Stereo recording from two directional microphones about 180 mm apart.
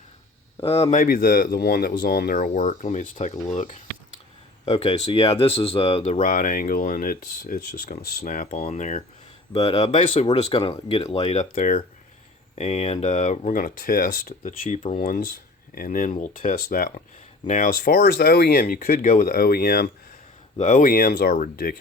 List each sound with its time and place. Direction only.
0.6 s speech: 30° left (ahead or behind)
0.9 s speech: 50° left (ahead or behind)
11.5 s speech: 50° left (ahead or behind)
12.5 s speech: 35° left (ahead or behind); by 19.9 s 60° left (ahead or behind)
20.6 s speech: 45° left (ahead or behind)